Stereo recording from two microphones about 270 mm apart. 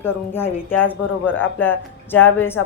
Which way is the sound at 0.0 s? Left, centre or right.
Centre.